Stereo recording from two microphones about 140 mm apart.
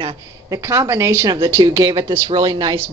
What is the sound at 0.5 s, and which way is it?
Speech, 20° right (ahead or behind).